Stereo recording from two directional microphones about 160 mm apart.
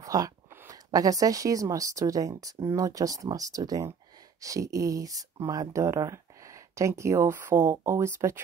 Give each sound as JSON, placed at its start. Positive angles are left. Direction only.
{"t": 0.0, "sound": "speech", "side_deg": -20}